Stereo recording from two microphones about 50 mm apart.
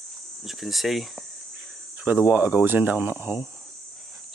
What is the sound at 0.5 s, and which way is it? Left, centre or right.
Speech, centre.